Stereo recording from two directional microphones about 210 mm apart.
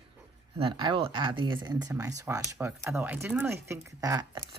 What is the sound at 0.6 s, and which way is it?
Speech, 25° right (ahead or behind).